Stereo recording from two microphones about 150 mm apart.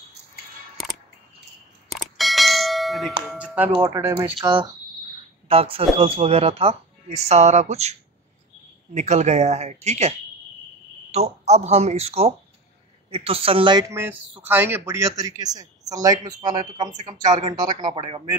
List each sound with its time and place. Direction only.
1.9 s clang: centre (ahead or behind)
3.3 s music: 10° right (ahead or behind)
3.8 s speech: 15° right (ahead or behind)
4.4 s speech: 30° right (ahead or behind)
14.4 s speech: 15° right (ahead or behind); by 18.2 s 30° right (ahead or behind)